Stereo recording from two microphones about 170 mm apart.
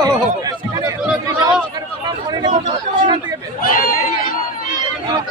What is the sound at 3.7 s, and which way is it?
Speech, 55° left (ahead or behind).